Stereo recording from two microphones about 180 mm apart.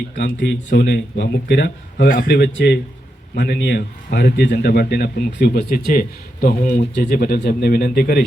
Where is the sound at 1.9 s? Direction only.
50° left (ahead or behind).